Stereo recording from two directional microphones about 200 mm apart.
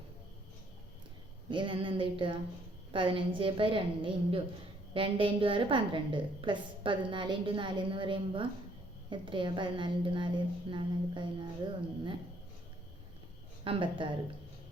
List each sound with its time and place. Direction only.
1.5 s a woman's voice: 25° right (ahead or behind)
13.7 s a woman's voice: 25° right (ahead or behind)